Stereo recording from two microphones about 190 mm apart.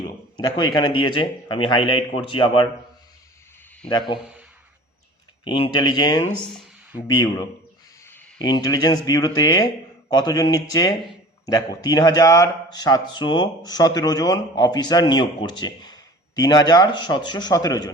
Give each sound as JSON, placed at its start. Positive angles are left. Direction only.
{"t": 0.0, "sound": "speech", "side_deg": 25}
{"t": 5.5, "sound": "speech", "side_deg": 25}